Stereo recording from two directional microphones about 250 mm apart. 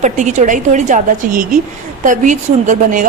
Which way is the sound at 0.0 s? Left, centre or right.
Right.